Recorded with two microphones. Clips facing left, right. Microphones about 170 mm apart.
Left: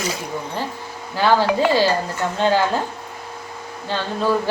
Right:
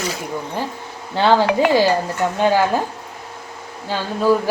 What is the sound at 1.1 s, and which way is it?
Speech, 25° right (ahead or behind).